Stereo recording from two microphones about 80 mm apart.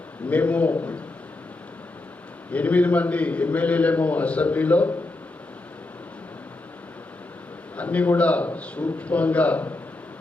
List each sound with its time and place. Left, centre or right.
0.3 s a man's voice: centre
2.5 s a man's voice: centre
7.8 s a man's voice: centre